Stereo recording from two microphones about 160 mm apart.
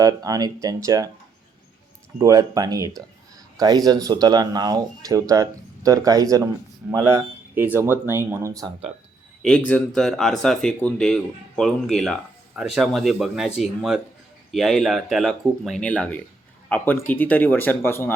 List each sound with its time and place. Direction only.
0.0 s speech: 20° right (ahead or behind)
2.1 s speech: 20° right (ahead or behind)
9.4 s speech: 5° left (ahead or behind)